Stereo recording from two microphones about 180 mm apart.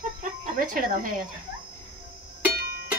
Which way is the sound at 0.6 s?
50° right (ahead or behind).